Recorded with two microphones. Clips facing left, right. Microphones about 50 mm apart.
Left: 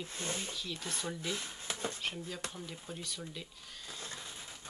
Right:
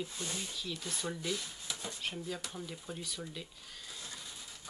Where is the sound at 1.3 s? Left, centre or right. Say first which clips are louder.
Even; left.